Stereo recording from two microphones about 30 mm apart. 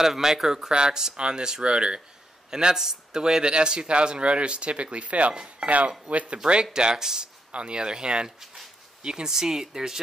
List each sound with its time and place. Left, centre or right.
0.0 s speech: centre
0.7 s a man's voice: right
5.3 s speech: right
6.0 s speech: right
6.3 s speech: right
7.5 s a man's voice: right
9.3 s speech: centre